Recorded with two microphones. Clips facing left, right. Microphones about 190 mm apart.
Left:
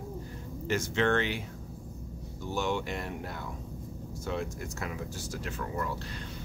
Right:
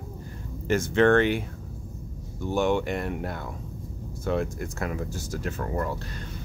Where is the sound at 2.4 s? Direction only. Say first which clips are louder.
Right 7 dB; 55° right (ahead or behind).